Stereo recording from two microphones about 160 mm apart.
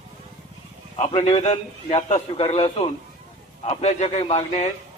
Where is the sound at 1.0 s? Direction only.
40° left (ahead or behind).